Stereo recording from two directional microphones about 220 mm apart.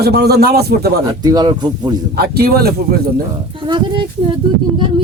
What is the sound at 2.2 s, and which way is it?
Speech, 45° right (ahead or behind).